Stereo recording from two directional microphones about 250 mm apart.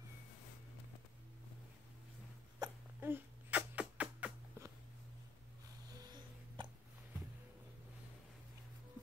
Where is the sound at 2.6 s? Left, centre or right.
Centre.